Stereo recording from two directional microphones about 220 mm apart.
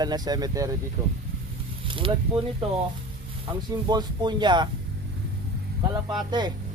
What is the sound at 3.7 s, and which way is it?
Speech, 20° right (ahead or behind).